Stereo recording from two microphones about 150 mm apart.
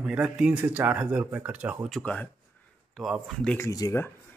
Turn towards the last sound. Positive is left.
turn(degrees=20)  # may be behind; listen again after turning